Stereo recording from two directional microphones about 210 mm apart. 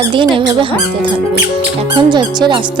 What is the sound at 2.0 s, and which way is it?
Speech, 20° right (ahead or behind).